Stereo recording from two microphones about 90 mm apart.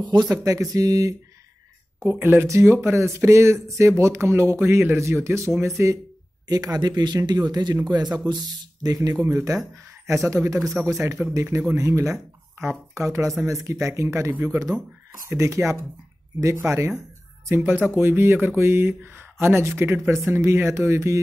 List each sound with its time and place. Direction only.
0.0 s speech: 50° right (ahead or behind)
2.0 s speech: 25° right (ahead or behind)
6.4 s speech: 45° right (ahead or behind); by 21.2 s 30° right (ahead or behind)